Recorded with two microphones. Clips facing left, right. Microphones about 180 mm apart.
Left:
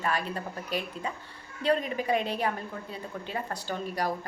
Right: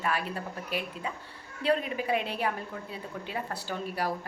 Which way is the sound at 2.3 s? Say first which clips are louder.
Left 1 dB; 10° right (ahead or behind).